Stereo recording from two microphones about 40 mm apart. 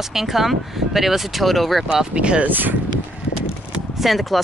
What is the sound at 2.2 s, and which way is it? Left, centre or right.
Speech, right.